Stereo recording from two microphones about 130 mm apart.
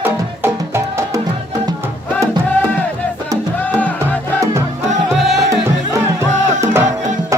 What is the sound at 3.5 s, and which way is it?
Music, 10° left (ahead or behind).